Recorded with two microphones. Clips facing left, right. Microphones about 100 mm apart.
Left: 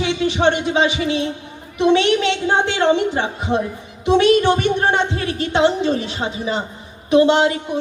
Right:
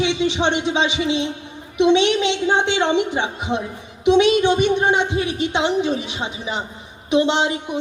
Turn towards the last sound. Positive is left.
turn(degrees=-20)  # may be behind; listen again after turning